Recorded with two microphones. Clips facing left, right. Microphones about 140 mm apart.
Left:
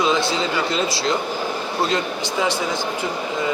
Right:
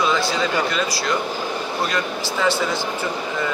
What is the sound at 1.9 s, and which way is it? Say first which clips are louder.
Speech: left 1 dB; 20° left (ahead or behind).